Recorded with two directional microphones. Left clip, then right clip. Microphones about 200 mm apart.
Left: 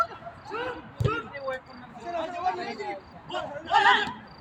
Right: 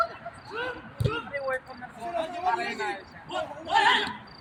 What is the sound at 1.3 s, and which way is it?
Cricket, 35° right (ahead or behind).